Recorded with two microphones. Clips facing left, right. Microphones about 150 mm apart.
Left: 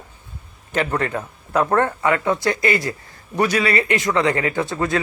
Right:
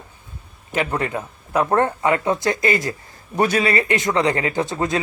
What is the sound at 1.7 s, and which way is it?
A man's voice, 25° right (ahead or behind).